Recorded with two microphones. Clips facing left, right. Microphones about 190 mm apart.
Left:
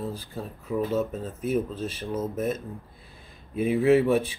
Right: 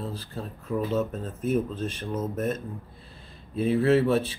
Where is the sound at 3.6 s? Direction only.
15° left (ahead or behind).